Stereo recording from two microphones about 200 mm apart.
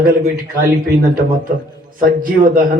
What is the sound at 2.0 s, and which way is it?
Speech, 45° right (ahead or behind).